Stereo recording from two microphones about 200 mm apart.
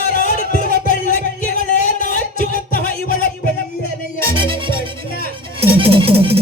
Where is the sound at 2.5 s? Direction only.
45° left (ahead or behind).